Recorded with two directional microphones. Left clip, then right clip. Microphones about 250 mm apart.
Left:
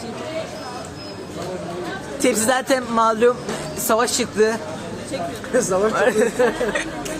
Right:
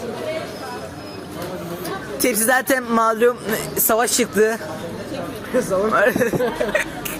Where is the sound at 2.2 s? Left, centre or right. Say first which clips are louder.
Even; centre.